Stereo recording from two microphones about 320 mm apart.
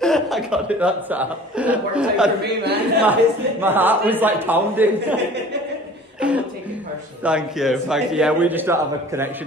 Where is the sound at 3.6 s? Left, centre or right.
Centre.